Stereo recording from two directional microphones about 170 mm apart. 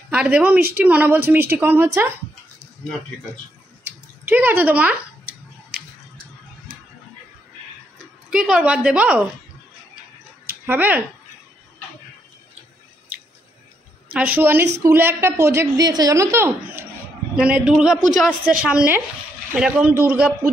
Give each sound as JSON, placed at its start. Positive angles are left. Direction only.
{"t": 0.1, "sound": "a woman's voice", "side_deg": -10}
{"t": 4.3, "sound": "a woman's voice", "side_deg": -10}
{"t": 5.7, "sound": "a sound", "side_deg": -60}
{"t": 8.3, "sound": "a woman's voice", "side_deg": -5}
{"t": 10.7, "sound": "a woman's voice", "side_deg": -10}
{"t": 14.1, "sound": "a woman's voice", "side_deg": -10}